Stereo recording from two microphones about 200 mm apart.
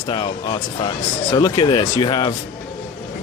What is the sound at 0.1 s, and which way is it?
Speech, 25° left (ahead or behind).